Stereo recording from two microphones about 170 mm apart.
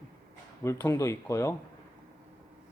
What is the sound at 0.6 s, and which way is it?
Speech, 15° left (ahead or behind).